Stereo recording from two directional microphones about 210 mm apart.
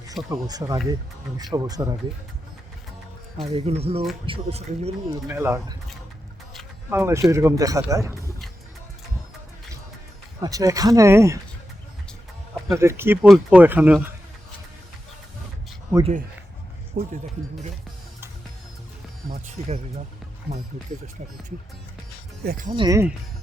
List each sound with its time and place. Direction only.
0.3 s speech: 20° right (ahead or behind)
3.4 s speech: 30° right (ahead or behind)
5.3 s speech: 10° right (ahead or behind)
6.9 s speech: 15° right (ahead or behind)
10.4 s speech: 15° right (ahead or behind)
12.6 s speech: 15° right (ahead or behind)
16.9 s speech: 40° right (ahead or behind)
19.3 s speech: 35° right (ahead or behind)
22.4 s speech: 40° right (ahead or behind)
22.7 s speech: 20° right (ahead or behind)